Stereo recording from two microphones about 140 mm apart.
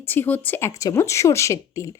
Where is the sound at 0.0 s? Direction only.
15° left (ahead or behind).